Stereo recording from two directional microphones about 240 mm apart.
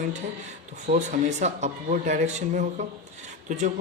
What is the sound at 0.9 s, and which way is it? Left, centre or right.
A man's voice, right.